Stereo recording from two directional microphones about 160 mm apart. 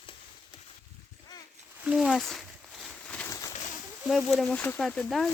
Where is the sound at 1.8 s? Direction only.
5° right (ahead or behind).